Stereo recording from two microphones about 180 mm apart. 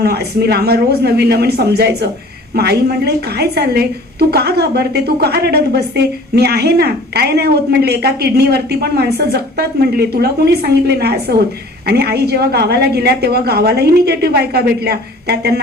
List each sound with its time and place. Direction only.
0.0 s a woman's voice: 65° right (ahead or behind)